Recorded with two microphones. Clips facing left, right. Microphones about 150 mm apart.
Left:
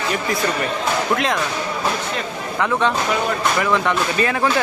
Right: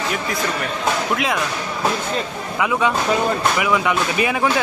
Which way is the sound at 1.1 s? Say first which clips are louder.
Left 1 dB; 5° right (ahead or behind).